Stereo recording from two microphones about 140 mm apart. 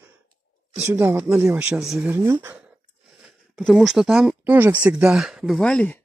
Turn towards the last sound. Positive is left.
turn(degrees=10)  # may be behind; listen again after turning